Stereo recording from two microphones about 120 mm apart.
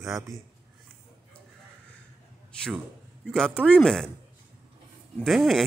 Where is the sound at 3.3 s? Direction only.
5° left (ahead or behind).